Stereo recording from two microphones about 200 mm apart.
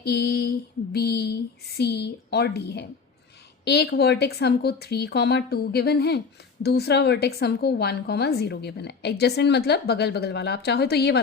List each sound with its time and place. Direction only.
0.0 s mantra: 55° left (ahead or behind)
0.9 s a woman's voice: 55° left (ahead or behind)